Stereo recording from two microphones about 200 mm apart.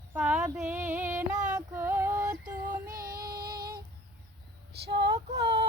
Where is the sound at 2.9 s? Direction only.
45° right (ahead or behind).